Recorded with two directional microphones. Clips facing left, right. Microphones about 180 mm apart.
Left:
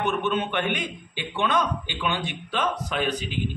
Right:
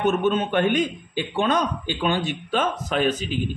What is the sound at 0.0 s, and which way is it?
A man's voice, 40° right (ahead or behind).